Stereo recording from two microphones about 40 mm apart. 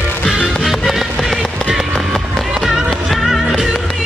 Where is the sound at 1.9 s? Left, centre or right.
Centre.